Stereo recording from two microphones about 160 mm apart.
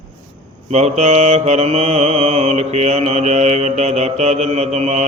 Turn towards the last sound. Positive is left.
turn(degrees=-45)  # may be behind; listen again after turning